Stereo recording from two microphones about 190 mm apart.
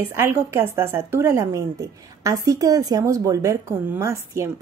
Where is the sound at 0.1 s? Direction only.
15° right (ahead or behind).